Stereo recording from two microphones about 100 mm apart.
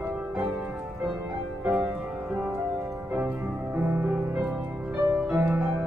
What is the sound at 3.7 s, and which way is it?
Music, 20° right (ahead or behind).